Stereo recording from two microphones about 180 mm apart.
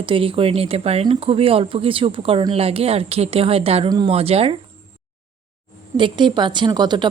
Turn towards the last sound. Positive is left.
turn(degrees=-25)  # may be behind; listen again after turning